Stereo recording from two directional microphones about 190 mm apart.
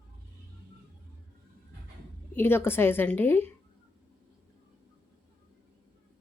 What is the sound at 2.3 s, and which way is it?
Speech, 10° left (ahead or behind).